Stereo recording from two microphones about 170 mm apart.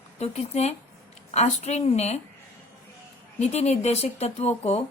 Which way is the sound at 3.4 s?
40° left (ahead or behind).